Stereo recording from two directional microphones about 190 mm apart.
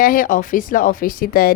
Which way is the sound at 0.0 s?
45° left (ahead or behind).